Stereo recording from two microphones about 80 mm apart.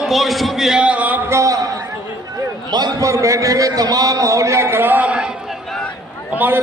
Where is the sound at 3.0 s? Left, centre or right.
Right; by 5.3 s centre.